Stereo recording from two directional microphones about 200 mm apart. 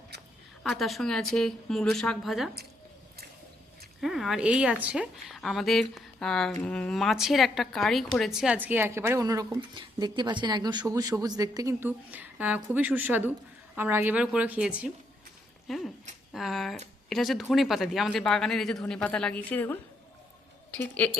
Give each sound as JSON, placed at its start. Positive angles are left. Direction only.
{"t": 0.6, "sound": "speech", "side_deg": 0}
{"t": 4.0, "sound": "a woman's voice", "side_deg": 0}